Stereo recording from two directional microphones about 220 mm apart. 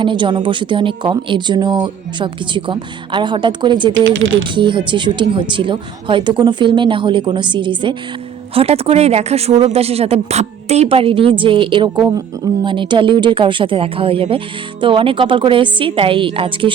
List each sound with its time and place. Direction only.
0.0 s speech: 20° right (ahead or behind)
4.0 s speech: 60° right (ahead or behind)
4.4 s speech: 20° right (ahead or behind)